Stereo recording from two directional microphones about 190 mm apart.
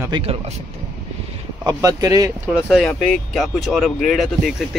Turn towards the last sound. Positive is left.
turn(degrees=0)  # may be behind; listen again after turning